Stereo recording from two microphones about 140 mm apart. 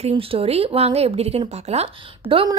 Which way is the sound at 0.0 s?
40° right (ahead or behind).